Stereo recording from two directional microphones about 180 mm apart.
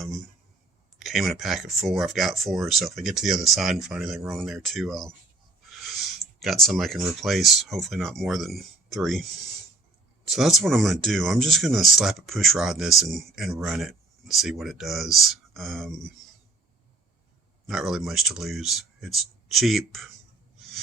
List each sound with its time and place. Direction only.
0.9 s speech: centre (ahead or behind)
6.4 s speech: centre (ahead or behind)
10.2 s speech: centre (ahead or behind)
17.7 s speech: centre (ahead or behind)